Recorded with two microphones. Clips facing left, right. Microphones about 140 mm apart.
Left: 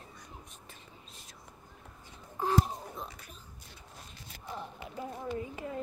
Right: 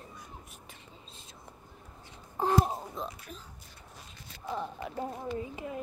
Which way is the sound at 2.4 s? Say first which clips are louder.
Right 3 dB; 50° right (ahead or behind).